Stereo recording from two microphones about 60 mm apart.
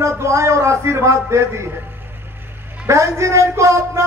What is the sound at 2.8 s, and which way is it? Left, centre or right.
A man's voice, right.